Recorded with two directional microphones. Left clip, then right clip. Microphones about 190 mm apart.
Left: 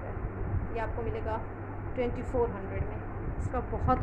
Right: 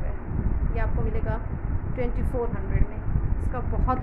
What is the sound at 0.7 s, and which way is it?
A woman's voice, 15° right (ahead or behind).